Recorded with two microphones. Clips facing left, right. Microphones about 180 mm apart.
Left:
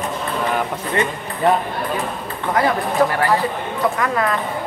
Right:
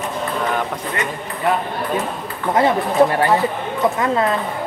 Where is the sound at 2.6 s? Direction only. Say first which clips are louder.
Right 3 dB; 25° right (ahead or behind).